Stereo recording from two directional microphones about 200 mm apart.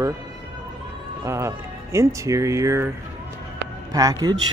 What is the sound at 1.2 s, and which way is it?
Speech, 15° right (ahead or behind).